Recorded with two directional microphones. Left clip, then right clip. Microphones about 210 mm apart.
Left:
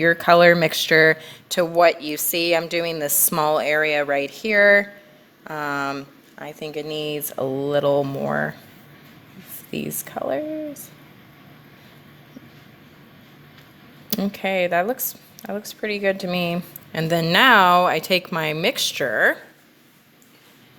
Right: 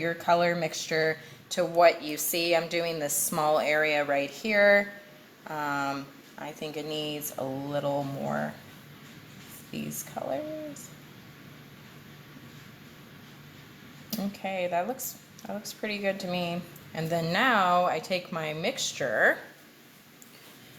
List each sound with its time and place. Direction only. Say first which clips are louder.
0.0 s speech: left 11 dB; 45° left (ahead or behind)
10.2 s speech: left 8 dB; 50° left (ahead or behind)
14.1 s speech: left 10 dB; 45° left (ahead or behind)